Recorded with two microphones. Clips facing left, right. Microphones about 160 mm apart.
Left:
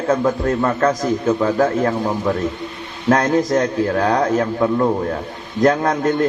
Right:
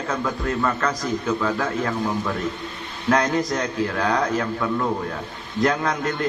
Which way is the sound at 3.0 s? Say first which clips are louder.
Left 5 dB; 40° left (ahead or behind).